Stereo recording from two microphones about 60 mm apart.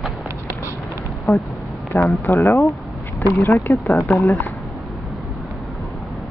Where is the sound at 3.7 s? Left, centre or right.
Left.